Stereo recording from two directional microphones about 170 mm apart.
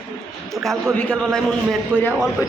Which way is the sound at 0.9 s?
5° left (ahead or behind).